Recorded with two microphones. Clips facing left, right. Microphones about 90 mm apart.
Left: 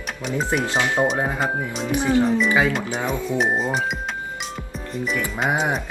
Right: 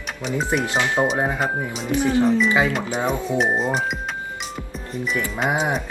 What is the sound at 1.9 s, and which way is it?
Speech, 20° left (ahead or behind).